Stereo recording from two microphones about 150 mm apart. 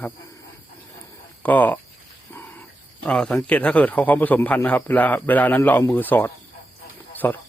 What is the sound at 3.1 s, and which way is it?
Speech, 5° left (ahead or behind).